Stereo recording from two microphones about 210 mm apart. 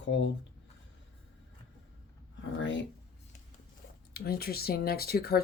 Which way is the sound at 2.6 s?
60° left (ahead or behind).